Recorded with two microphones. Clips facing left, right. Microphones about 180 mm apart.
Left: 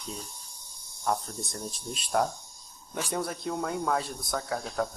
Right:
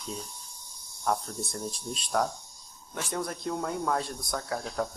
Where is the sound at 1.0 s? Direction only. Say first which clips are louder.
Even; centre (ahead or behind).